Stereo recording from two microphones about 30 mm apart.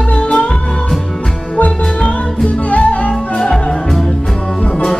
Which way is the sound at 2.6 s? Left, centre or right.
Left.